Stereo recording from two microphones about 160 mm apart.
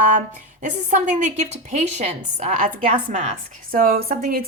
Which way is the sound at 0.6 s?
50° right (ahead or behind).